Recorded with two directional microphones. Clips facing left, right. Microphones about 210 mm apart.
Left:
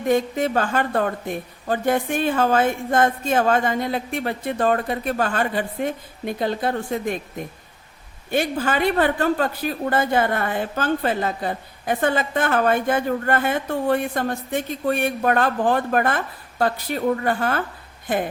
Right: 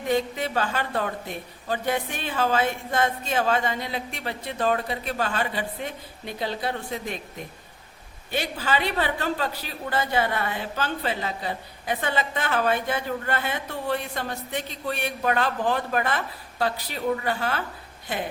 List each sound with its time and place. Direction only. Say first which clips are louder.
0.1 s speech: left 5 dB; 50° left (ahead or behind)
8.3 s speech: left 5 dB; 50° left (ahead or behind)